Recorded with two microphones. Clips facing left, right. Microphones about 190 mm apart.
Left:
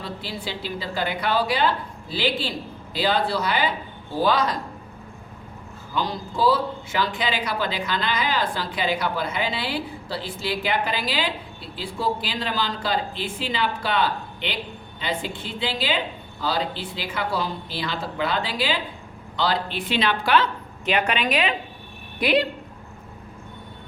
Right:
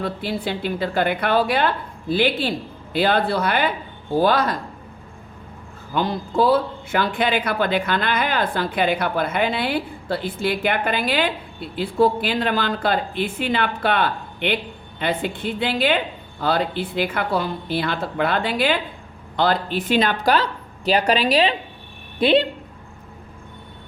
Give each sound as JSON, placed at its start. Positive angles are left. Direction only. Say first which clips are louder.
{"t": 0.0, "sound": "speech", "louder": "right 7 dB", "side_deg": -55}
{"t": 5.9, "sound": "speech", "louder": "right 5 dB", "side_deg": -55}